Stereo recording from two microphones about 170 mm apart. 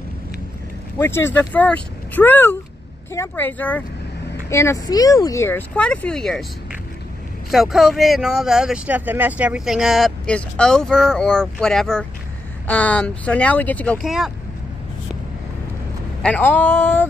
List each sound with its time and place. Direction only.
0.9 s speech: 15° left (ahead or behind)
7.5 s speech: centre (ahead or behind)
16.2 s speech: 10° left (ahead or behind)